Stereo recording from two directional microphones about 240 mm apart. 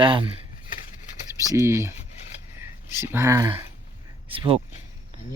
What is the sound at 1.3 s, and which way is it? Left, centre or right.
Speech, centre.